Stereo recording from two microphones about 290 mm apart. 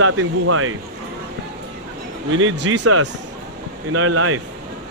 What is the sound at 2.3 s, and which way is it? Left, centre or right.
A man's voice, right.